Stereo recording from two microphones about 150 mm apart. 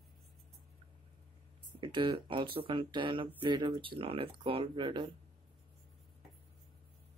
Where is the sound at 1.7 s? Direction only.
35° right (ahead or behind).